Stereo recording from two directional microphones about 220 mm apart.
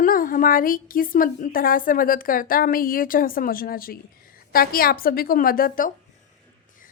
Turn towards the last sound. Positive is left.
turn(degrees=40)  # may be behind; listen again after turning